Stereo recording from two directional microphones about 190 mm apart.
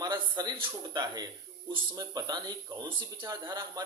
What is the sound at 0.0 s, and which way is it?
A man's voice, 20° right (ahead or behind).